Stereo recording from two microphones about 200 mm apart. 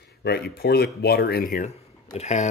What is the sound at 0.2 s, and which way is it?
Speech, 55° left (ahead or behind).